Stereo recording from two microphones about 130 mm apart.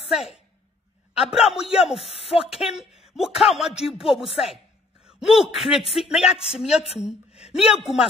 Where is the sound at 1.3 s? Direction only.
5° right (ahead or behind).